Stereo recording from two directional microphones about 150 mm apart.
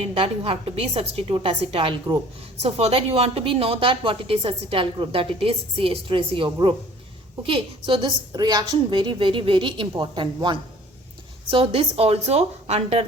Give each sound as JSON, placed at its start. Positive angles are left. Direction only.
{"t": 0.1, "sound": "a woman's voice", "side_deg": -40}